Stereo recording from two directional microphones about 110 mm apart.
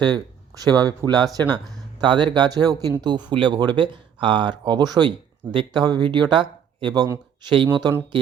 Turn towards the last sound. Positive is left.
turn(degrees=-40)  # may be behind; listen again after turning